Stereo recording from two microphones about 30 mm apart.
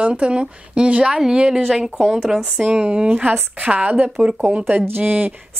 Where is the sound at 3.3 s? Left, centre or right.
Right.